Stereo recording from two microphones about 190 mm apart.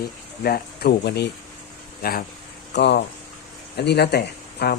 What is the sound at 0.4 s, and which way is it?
A man's voice, 55° left (ahead or behind).